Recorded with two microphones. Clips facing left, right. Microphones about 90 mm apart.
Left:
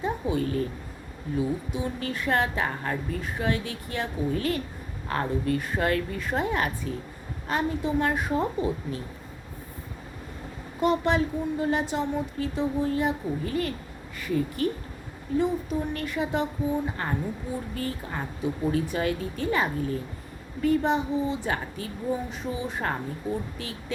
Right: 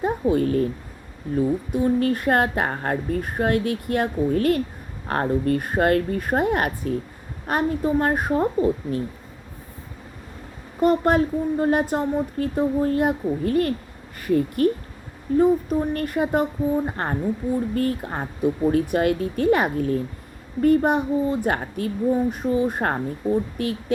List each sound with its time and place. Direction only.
0.0 s a woman's voice: 50° right (ahead or behind)
10.8 s a woman's voice: 45° right (ahead or behind)